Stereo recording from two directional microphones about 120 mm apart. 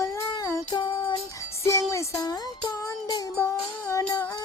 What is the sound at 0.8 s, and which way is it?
Music, 40° left (ahead or behind).